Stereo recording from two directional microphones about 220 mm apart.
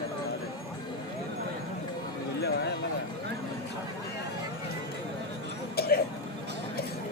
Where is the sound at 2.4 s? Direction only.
45° left (ahead or behind).